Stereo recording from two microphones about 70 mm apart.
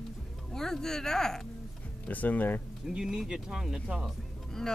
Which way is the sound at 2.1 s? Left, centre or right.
Left.